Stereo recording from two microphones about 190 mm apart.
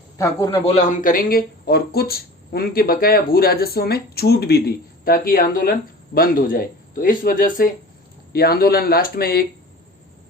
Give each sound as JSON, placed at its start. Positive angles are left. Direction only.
{"t": 0.2, "sound": "a man's voice", "side_deg": 15}
{"t": 0.6, "sound": "speech", "side_deg": 35}